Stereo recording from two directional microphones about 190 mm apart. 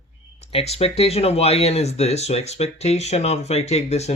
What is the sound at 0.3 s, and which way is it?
Speech, 35° left (ahead or behind).